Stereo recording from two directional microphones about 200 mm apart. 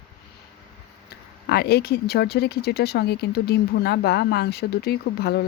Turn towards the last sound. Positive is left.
turn(degrees=55)  # may be behind; listen again after turning